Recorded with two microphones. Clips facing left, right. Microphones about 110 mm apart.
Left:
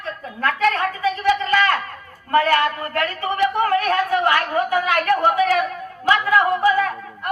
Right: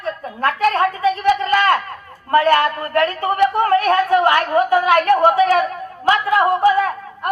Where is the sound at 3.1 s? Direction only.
60° right (ahead or behind).